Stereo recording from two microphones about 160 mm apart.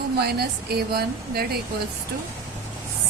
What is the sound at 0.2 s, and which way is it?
Speech, 80° right.